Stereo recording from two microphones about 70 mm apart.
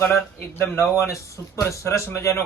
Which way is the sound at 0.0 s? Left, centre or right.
Left.